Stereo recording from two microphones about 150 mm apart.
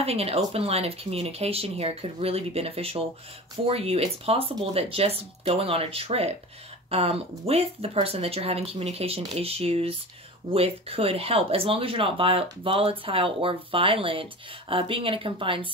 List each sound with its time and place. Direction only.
0.0 s speech: 40° right (ahead or behind)